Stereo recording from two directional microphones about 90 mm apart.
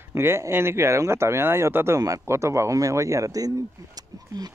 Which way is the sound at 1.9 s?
40° right (ahead or behind).